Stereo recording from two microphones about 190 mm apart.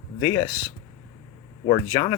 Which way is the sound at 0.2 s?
15° left (ahead or behind).